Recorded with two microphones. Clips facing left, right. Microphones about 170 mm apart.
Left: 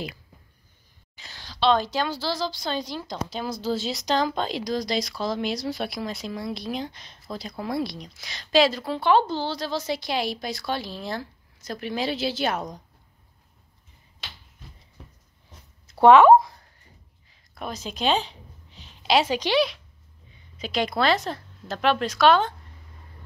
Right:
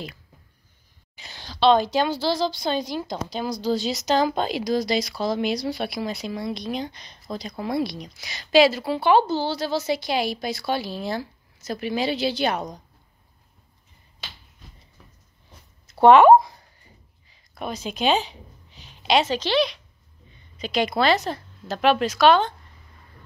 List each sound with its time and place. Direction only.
1.1 s a woman's voice: 20° right (ahead or behind)
3.3 s speech: centre (ahead or behind)
16.3 s a sound: 5° right (ahead or behind)
17.3 s a woman's voice: centre (ahead or behind)